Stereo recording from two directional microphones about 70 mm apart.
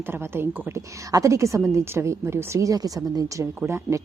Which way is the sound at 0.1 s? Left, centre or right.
Right.